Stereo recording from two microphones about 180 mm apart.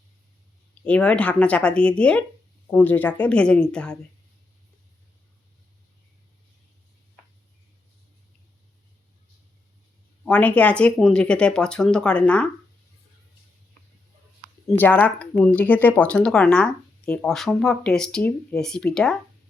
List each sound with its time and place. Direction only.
0.9 s speech: 5° left (ahead or behind)
10.2 s speech: 10° left (ahead or behind)
14.7 s speech: 10° left (ahead or behind)